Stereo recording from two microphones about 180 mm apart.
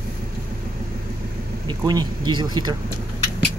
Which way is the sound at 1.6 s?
25° right (ahead or behind).